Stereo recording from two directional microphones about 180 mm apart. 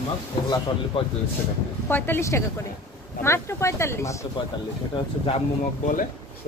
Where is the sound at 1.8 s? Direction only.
10° left (ahead or behind).